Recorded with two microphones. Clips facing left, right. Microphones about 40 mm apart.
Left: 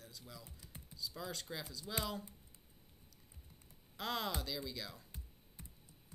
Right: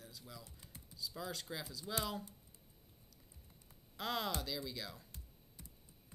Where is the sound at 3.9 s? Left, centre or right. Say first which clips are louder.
Even; centre.